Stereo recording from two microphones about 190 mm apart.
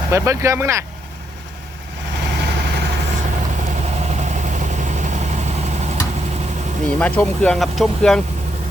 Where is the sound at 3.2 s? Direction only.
40° right (ahead or behind).